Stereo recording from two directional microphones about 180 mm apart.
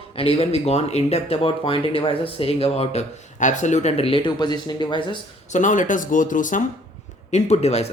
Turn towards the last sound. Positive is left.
turn(degrees=35)  # may be behind; listen again after turning